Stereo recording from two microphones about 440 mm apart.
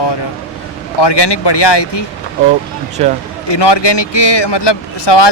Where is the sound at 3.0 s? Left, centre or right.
Centre.